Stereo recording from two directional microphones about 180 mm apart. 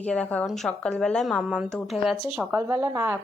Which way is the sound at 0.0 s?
5° left (ahead or behind).